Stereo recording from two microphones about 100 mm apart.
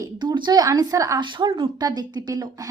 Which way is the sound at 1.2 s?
50° right (ahead or behind).